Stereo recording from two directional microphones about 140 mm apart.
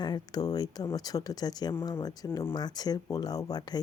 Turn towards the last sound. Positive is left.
turn(degrees=30)  # may be behind; listen again after turning